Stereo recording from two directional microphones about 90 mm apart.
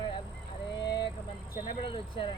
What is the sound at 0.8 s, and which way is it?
Speech, 45° left (ahead or behind).